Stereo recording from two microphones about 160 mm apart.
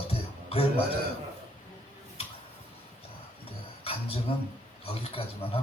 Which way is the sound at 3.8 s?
35° left (ahead or behind).